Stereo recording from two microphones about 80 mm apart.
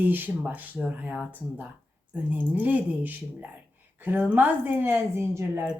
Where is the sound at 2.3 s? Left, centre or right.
Right.